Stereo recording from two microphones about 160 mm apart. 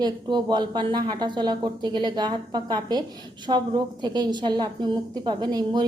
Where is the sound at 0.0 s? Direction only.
30° right (ahead or behind).